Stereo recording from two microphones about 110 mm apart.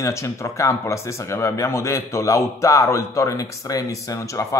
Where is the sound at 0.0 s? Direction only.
25° left (ahead or behind).